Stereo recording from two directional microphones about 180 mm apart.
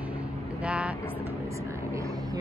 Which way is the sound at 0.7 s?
5° right (ahead or behind).